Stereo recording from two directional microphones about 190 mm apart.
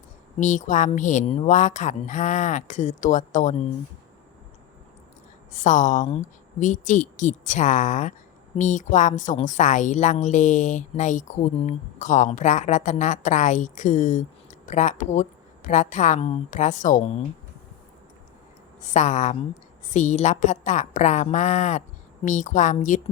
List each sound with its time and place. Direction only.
0.3 s a woman's voice: 40° left (ahead or behind)
5.5 s a woman's voice: 40° left (ahead or behind)
18.9 s a woman's voice: 40° left (ahead or behind)